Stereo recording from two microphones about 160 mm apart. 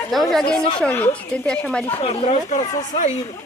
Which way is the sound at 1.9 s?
40° left (ahead or behind).